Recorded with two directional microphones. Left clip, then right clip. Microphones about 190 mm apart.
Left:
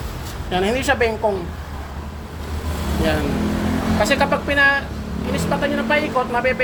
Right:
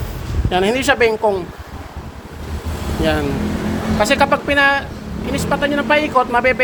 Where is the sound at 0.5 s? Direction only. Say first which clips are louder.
Right 4 dB; 45° right (ahead or behind).